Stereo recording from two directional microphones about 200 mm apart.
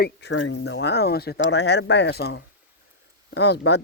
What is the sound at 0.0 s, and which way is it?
Speech, 60° left (ahead or behind).